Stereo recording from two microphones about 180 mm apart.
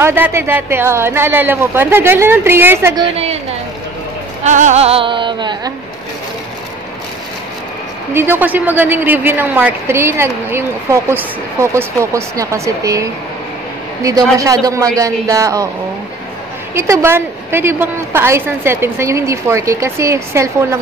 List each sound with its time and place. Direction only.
0.0 s a woman's voice: 10° right (ahead or behind)
3.0 s music: 35° right (ahead or behind)
4.4 s music: 40° right (ahead or behind); by 5.7 s 25° right (ahead or behind)
8.1 s a woman's voice: 15° right (ahead or behind)
14.4 s a woman's voice: 15° right (ahead or behind)
16.7 s a woman's voice: 15° right (ahead or behind)